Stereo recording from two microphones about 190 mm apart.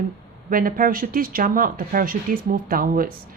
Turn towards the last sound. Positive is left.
turn(degrees=-50)  # may be behind; listen again after turning